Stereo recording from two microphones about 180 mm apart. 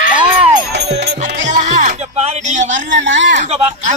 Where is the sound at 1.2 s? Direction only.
45° right (ahead or behind).